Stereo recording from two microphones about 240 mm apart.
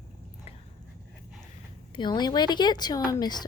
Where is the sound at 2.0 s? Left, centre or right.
Centre.